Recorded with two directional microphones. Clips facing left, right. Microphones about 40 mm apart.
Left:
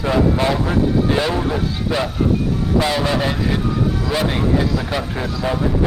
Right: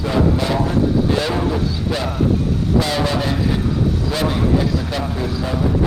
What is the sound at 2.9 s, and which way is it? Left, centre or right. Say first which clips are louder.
Speech: left 1 dB; centre.